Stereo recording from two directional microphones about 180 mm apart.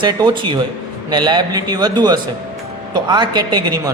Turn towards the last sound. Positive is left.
turn(degrees=-25)  # may be behind; listen again after turning